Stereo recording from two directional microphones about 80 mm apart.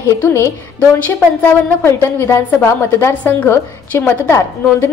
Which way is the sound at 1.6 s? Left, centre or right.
Left.